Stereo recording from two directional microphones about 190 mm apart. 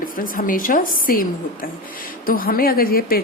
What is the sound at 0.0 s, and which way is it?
A woman's voice, 45° left (ahead or behind).